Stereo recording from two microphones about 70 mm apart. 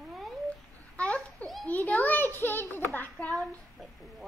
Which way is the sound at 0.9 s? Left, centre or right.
Centre.